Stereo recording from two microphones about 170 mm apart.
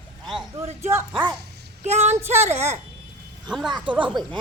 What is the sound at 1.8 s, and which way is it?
Speech, 40° right (ahead or behind).